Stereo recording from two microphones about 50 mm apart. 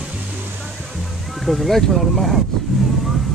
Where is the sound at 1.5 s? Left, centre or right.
Centre.